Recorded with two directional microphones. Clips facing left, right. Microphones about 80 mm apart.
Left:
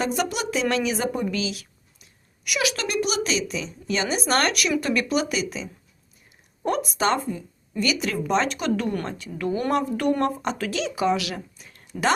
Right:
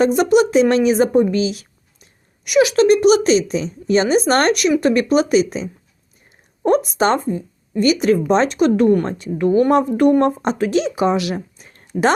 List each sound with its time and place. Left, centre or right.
0.0 s a woman's voice: right
6.7 s speech: right